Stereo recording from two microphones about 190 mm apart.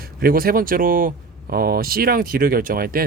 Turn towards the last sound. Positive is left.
turn(degrees=-50)  # may be behind; listen again after turning